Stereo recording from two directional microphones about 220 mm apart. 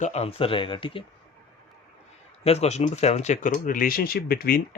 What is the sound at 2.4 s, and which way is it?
Speech, 30° left (ahead or behind).